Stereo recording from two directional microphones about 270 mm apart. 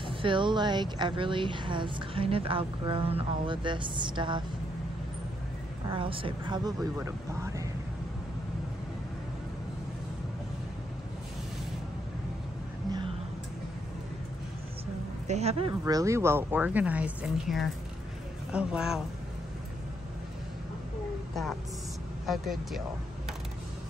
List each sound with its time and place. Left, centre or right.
0.0 s a woman's voice: centre
5.9 s a woman's voice: centre
15.2 s speech: right
15.8 s a woman's voice: centre
22.2 s speech: centre